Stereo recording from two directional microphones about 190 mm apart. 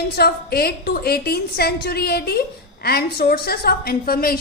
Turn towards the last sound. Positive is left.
turn(degrees=50)  # may be behind; listen again after turning